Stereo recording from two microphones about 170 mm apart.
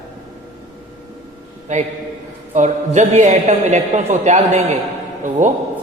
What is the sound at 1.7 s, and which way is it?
A man's voice, 45° right (ahead or behind).